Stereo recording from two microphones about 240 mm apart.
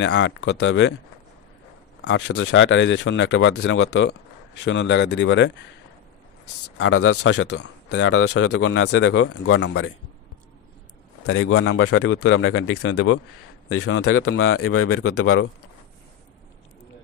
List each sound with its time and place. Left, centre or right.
0.0 s speech: left
2.0 s speech: left
6.8 s speech: left
11.2 s speech: left
14.0 s speech: left